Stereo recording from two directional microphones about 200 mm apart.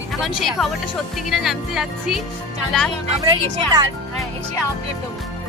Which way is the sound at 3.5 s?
20° right (ahead or behind).